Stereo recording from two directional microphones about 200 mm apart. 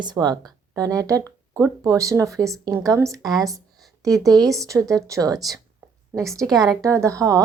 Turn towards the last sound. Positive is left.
turn(degrees=-15)  # may be behind; listen again after turning